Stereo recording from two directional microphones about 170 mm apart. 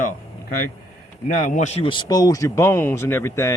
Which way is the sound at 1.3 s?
50° left (ahead or behind).